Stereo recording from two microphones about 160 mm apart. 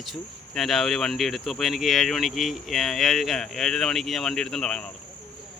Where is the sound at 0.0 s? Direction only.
Centre (ahead or behind).